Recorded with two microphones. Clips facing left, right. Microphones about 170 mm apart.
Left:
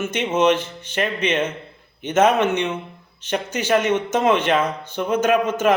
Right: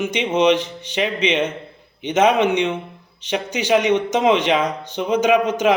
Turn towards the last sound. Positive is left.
turn(degrees=-15)  # may be behind; listen again after turning